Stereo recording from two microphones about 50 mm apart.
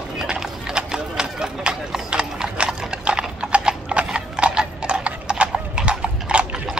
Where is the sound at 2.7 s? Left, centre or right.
Centre.